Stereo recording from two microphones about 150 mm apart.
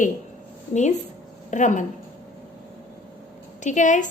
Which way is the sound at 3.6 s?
55° left (ahead or behind).